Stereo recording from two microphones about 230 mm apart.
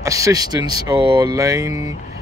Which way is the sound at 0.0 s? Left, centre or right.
Centre.